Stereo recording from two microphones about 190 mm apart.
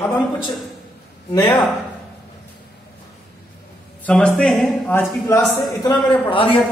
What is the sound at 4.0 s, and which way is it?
A man's voice, 5° left (ahead or behind).